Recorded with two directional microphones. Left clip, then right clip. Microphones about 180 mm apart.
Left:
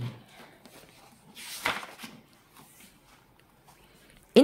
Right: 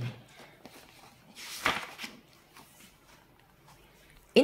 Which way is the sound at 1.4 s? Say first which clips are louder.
Left 1 dB; 25° left (ahead or behind).